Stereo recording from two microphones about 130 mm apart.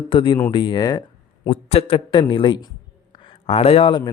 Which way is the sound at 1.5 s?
50° left (ahead or behind).